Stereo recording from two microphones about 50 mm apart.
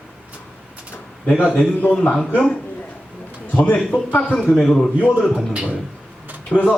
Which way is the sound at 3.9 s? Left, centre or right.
Left.